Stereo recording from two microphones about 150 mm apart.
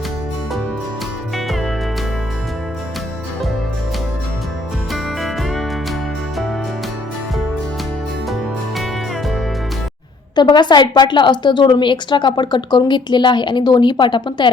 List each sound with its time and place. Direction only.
1.5 s music: centre (ahead or behind)
5.2 s music: centre (ahead or behind)
10.3 s a woman's voice: 30° left (ahead or behind)